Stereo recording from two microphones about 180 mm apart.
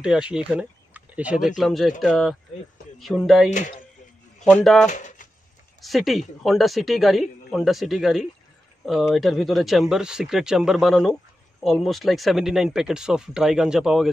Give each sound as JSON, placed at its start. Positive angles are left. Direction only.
{"t": 0.0, "sound": "speech", "side_deg": -5}
{"t": 0.5, "sound": "a sound", "side_deg": -5}
{"t": 1.6, "sound": "speech", "side_deg": 0}
{"t": 3.4, "sound": "speech", "side_deg": 40}
{"t": 4.8, "sound": "a sound", "side_deg": 45}
{"t": 5.8, "sound": "speech", "side_deg": 0}